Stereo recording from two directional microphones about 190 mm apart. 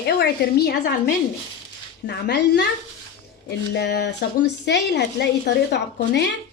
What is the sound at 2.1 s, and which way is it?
A woman's voice, 60° left (ahead or behind).